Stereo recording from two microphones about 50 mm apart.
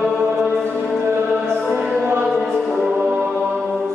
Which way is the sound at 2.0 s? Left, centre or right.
Right.